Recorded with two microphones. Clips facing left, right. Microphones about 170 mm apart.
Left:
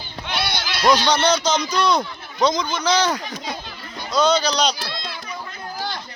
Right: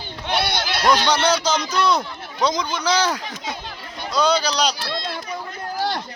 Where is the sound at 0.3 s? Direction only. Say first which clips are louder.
Right 4 dB; 55° right (ahead or behind).